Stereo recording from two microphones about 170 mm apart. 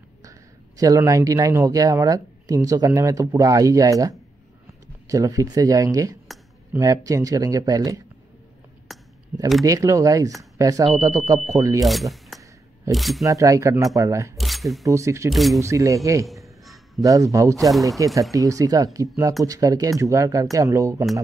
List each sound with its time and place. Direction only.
0.2 s speech: 20° right (ahead or behind)
8.9 s a sound: centre (ahead or behind)
9.3 s speech: 10° right (ahead or behind)
9.7 s speech: 20° right (ahead or behind)
11.8 s speech: centre (ahead or behind)
13.2 s speech: 20° right (ahead or behind)
14.4 s speech: centre (ahead or behind)
14.9 s speech: 15° right (ahead or behind)
15.3 s speech: centre (ahead or behind)
15.6 s speech: 20° right (ahead or behind)